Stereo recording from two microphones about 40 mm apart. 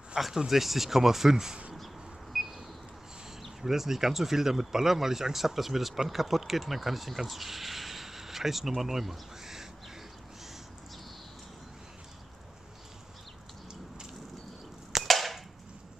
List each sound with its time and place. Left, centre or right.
0.2 s speech: centre
0.5 s speech: centre
2.3 s a sound: centre
3.3 s speech: centre
15.0 s cap gun: centre